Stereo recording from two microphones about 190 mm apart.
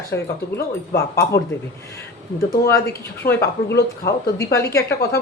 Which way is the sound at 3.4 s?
55° left (ahead or behind).